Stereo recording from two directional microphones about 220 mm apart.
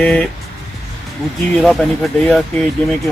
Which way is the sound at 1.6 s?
Centre (ahead or behind).